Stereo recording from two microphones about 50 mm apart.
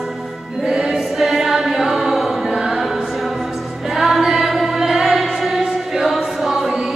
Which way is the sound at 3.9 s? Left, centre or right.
Centre.